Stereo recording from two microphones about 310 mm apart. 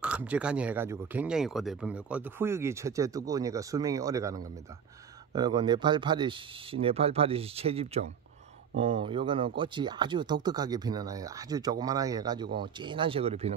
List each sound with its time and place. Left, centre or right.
0.0 s speech: centre